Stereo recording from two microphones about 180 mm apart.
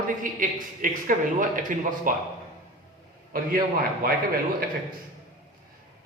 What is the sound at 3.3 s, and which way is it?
Speech, 55° right (ahead or behind).